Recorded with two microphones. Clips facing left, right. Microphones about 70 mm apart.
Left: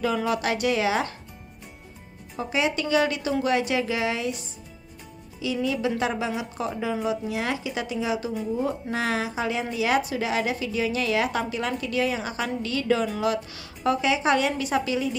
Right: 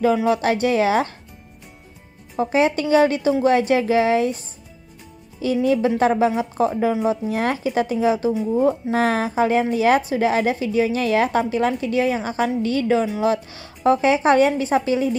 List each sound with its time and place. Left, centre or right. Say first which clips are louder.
0.0 s a woman's voice: right 7 dB; right
2.3 s a woman's voice: right 7 dB; right